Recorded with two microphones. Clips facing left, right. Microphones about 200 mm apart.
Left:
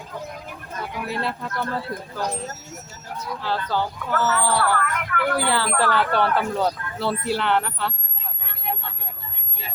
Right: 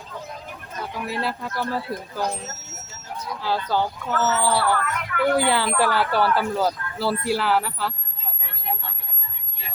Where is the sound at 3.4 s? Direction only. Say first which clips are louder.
Right 2 dB; 10° right (ahead or behind).